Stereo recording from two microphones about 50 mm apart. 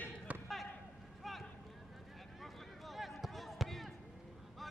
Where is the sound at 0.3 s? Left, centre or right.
Right.